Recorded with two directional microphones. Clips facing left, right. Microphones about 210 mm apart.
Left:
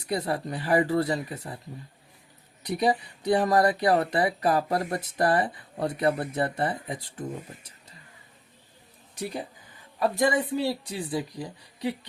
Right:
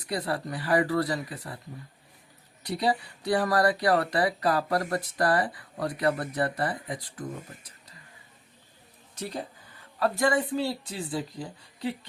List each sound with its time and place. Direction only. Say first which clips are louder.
0.1 s speech: left 2 dB; 25° left (ahead or behind)
2.6 s speech: left 2 dB; 20° left (ahead or behind)
9.1 s speech: left 2 dB; 15° left (ahead or behind)